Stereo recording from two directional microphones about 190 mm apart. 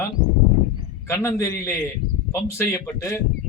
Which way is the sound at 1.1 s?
15° left (ahead or behind).